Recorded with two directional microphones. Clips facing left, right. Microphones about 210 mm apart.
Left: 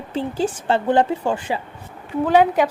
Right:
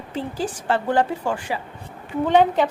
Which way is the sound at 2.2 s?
10° left (ahead or behind).